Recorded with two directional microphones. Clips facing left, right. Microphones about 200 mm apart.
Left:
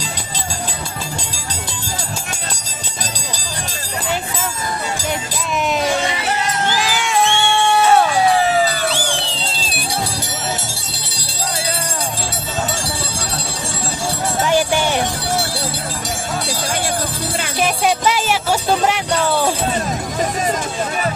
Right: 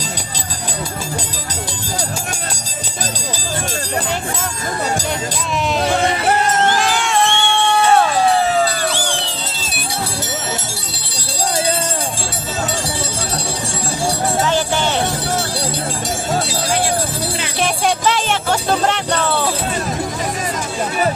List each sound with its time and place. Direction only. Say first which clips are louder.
5.8 s music: right 3 dB; 55° right (ahead or behind)
6.7 s music: right 1 dB; 5° left (ahead or behind)
14.4 s music: left 5 dB; 15° left (ahead or behind)
17.6 s music: left 1 dB; 5° left (ahead or behind)